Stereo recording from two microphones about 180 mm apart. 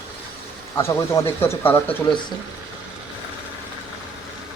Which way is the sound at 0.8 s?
15° left (ahead or behind).